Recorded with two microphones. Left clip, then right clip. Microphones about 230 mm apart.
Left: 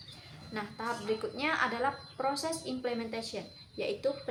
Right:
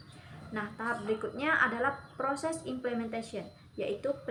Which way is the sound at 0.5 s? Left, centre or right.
Centre.